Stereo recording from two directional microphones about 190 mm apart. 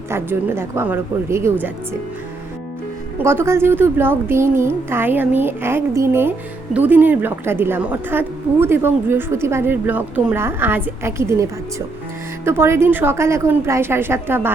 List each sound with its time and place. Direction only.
0.1 s a woman's voice: 10° right (ahead or behind)
3.2 s a woman's voice: 10° right (ahead or behind)
12.5 s a woman's voice: 15° right (ahead or behind)